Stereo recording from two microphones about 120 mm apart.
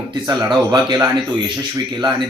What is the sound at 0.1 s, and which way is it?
Speech, 40° right (ahead or behind).